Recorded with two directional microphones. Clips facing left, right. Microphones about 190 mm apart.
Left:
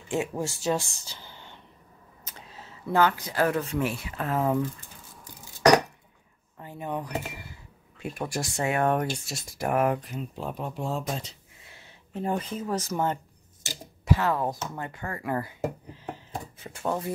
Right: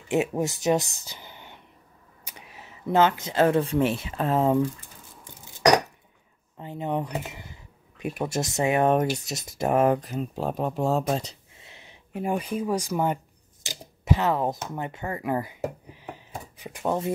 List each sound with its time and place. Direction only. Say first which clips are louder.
0.1 s speech: right 4 dB; 20° right (ahead or behind)
6.6 s speech: right 5 dB; 20° right (ahead or behind)
10.0 s speech: right 5 dB; 40° right (ahead or behind)
11.6 s speech: right 2 dB; 20° right (ahead or behind)